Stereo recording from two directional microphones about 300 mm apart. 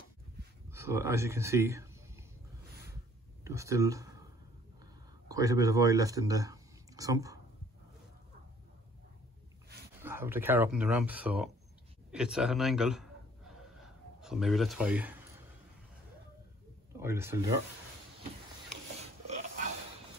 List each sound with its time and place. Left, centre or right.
0.7 s speech: centre
3.4 s speech: centre
5.3 s speech: centre
10.0 s speech: centre
12.1 s gasp: centre
14.2 s speech: centre
16.9 s speech: centre
18.9 s a sound: right